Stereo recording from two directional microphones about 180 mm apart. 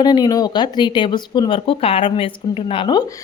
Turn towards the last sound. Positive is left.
turn(degrees=25)  # may be behind; listen again after turning